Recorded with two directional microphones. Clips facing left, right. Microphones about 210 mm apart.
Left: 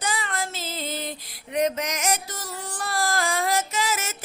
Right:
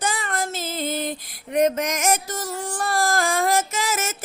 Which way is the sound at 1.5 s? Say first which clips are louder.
Right 4 dB; 50° right (ahead or behind).